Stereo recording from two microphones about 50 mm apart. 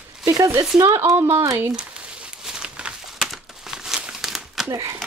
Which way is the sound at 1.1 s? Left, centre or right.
Right.